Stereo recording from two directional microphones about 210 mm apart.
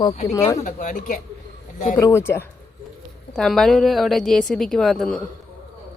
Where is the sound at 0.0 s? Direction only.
30° left (ahead or behind).